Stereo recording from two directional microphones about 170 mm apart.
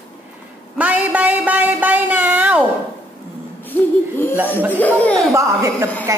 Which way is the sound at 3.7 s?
10° left (ahead or behind).